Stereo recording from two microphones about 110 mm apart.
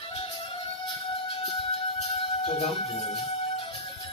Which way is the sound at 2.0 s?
65° left (ahead or behind).